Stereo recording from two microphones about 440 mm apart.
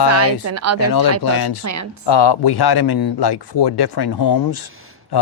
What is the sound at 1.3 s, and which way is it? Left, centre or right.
Speech, left.